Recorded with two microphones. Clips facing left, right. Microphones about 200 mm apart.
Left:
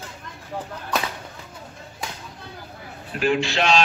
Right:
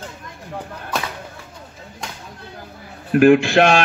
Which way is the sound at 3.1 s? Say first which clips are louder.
Right 11 dB; 55° right (ahead or behind).